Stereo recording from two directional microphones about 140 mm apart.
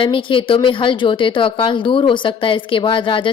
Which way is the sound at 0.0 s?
35° left (ahead or behind).